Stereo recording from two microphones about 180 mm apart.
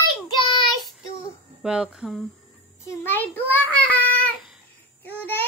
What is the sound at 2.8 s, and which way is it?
Child singing, 10° left (ahead or behind).